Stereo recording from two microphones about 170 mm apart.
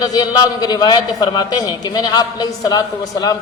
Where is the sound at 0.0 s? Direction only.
25° left (ahead or behind).